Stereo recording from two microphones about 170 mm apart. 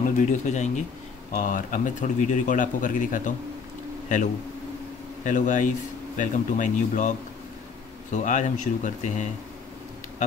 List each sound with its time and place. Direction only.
0.0 s a man's voice: 45° left (ahead or behind)
5.2 s a man's voice: 50° left (ahead or behind)